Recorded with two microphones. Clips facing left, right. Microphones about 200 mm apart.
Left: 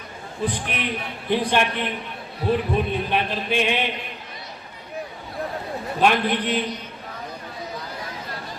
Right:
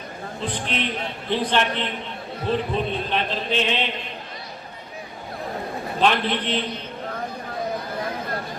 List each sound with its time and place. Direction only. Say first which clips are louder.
0.4 s speech: left 1 dB; 10° left (ahead or behind)
6.0 s speech: left 1 dB; 10° left (ahead or behind)